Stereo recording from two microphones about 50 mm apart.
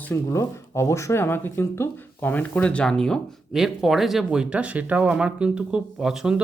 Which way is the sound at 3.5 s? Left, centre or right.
Centre.